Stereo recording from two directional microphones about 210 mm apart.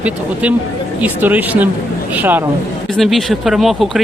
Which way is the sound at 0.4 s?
5° right (ahead or behind).